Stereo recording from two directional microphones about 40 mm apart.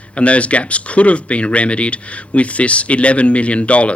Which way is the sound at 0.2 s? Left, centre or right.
Left.